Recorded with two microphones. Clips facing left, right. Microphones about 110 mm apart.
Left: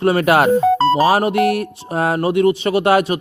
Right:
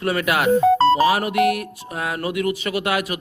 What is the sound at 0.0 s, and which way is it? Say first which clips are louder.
Speech: left 7 dB; 30° left (ahead or behind).